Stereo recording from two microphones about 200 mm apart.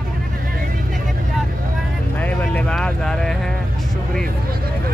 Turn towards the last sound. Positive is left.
turn(degrees=5)  # may be behind; listen again after turning